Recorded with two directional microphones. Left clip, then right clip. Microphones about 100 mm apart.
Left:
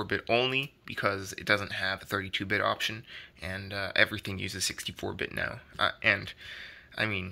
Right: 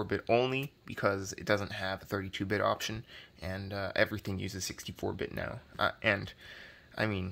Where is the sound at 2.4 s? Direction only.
40° right (ahead or behind).